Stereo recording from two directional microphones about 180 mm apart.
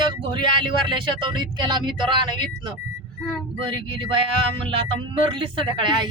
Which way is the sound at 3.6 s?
30° right (ahead or behind).